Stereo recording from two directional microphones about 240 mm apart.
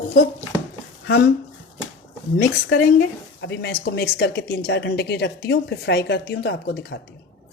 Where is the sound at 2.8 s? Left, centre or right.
Left.